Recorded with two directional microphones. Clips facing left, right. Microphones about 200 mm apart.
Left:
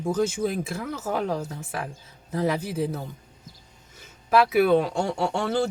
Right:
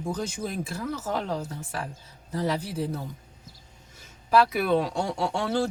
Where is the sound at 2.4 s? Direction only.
10° left (ahead or behind).